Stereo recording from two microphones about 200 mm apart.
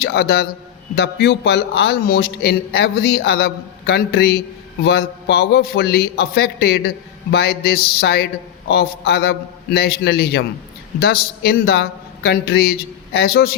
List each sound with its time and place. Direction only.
0.0 s a man's voice: 55° left (ahead or behind)